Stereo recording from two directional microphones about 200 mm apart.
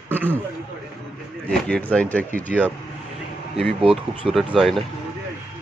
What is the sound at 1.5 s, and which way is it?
Speech, 5° left (ahead or behind).